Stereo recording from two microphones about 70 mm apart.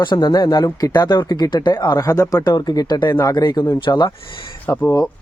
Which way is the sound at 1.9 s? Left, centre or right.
Left.